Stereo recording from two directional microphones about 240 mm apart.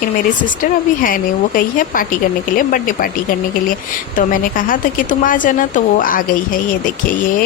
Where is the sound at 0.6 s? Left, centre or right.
Left.